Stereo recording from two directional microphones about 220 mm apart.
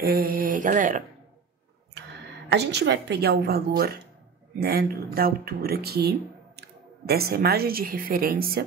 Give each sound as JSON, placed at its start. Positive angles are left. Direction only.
{"t": 0.0, "sound": "speech", "side_deg": -40}
{"t": 2.0, "sound": "a sound", "side_deg": -50}
{"t": 2.5, "sound": "speech", "side_deg": -50}